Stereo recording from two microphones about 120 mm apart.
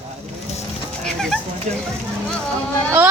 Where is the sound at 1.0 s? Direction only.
5° left (ahead or behind).